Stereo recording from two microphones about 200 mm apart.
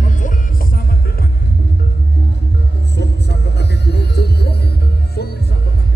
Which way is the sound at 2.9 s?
55° left (ahead or behind).